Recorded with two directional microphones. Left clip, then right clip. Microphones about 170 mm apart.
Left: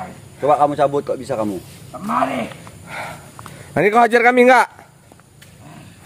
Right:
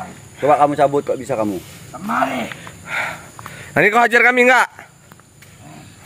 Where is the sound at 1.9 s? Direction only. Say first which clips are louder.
Even; centre (ahead or behind).